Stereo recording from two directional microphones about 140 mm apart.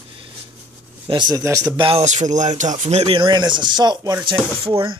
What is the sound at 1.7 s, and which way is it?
Speech, 40° right (ahead or behind).